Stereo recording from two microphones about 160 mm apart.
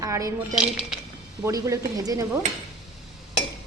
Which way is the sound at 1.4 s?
20° right (ahead or behind).